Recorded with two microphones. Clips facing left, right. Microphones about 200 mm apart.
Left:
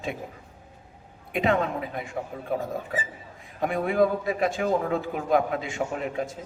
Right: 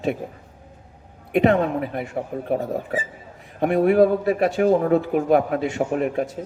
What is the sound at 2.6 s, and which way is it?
Speech, 35° right (ahead or behind).